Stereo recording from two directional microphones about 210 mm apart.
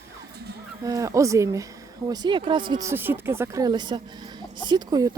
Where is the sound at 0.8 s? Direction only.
15° right (ahead or behind).